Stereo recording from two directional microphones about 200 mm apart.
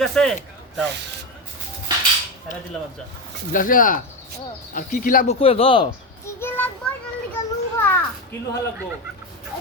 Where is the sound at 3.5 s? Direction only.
45° left (ahead or behind).